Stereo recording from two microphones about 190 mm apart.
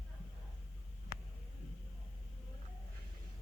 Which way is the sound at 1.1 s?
50° left (ahead or behind).